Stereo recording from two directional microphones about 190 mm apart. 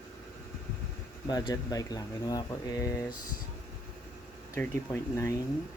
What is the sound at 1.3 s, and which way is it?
Speech, 20° left (ahead or behind).